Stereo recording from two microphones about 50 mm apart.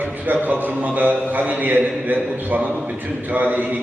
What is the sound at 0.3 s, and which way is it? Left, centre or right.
A man's voice, right.